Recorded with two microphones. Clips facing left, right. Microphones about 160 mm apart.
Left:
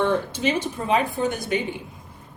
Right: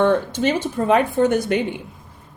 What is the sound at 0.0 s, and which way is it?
Speech, 55° right (ahead or behind).